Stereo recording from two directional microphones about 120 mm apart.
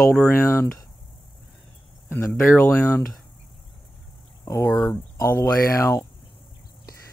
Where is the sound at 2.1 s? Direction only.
20° left (ahead or behind).